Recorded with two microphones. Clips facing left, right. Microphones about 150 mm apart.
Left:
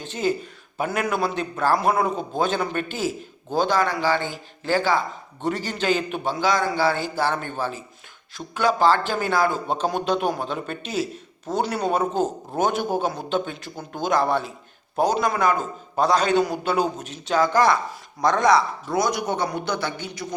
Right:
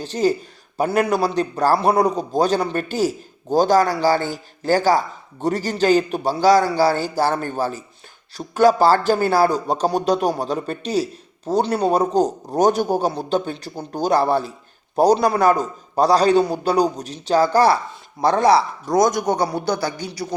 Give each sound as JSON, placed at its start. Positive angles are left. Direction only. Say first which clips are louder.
{"t": 0.0, "sound": "a man's voice", "louder": "right 5 dB", "side_deg": -35}
{"t": 18.9, "sound": "a man's voice", "louder": "right 6 dB", "side_deg": -45}